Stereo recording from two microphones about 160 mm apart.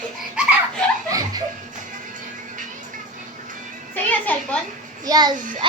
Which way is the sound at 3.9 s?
10° left (ahead or behind).